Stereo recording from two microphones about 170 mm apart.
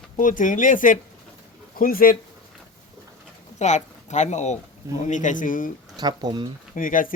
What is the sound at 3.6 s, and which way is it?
Speech, 45° left (ahead or behind).